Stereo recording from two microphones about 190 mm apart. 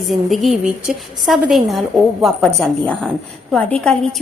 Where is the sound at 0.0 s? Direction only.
Centre (ahead or behind).